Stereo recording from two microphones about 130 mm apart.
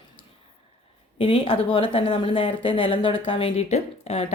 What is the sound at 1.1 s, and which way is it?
Speech, 45° left (ahead or behind).